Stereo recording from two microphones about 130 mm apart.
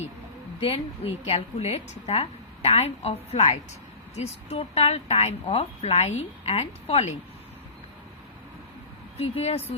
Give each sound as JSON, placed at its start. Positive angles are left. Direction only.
{"t": 0.6, "sound": "a woman's voice", "side_deg": 50}
{"t": 9.1, "sound": "a woman's voice", "side_deg": 50}